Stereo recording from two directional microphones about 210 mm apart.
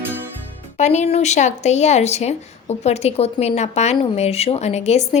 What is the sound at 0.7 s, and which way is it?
Speech, 35° left (ahead or behind).